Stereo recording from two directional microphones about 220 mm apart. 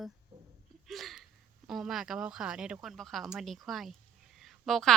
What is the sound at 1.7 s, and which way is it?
A woman's voice, centre (ahead or behind).